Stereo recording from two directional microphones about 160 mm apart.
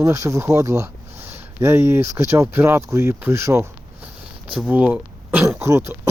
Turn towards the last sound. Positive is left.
turn(degrees=-15)  # may be behind; listen again after turning